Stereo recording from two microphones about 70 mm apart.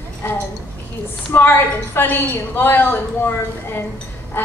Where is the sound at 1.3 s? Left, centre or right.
Left.